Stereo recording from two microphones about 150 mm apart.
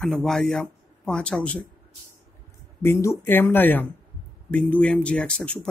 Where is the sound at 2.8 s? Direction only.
15° left (ahead or behind).